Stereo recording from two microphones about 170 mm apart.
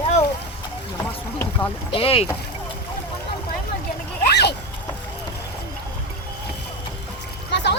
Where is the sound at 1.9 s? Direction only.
35° left (ahead or behind).